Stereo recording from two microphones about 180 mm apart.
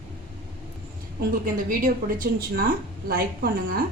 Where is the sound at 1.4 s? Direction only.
50° right (ahead or behind).